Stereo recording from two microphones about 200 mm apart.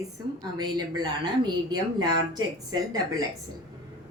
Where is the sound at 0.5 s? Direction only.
20° right (ahead or behind).